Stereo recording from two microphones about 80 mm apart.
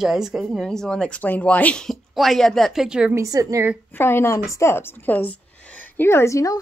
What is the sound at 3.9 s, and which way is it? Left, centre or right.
A woman's voice, left.